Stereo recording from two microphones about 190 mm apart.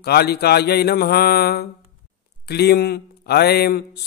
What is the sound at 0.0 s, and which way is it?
Speech, 55° left (ahead or behind).